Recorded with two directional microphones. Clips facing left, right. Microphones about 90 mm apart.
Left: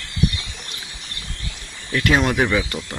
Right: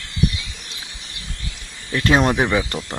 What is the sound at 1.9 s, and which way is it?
Speech, 25° right (ahead or behind).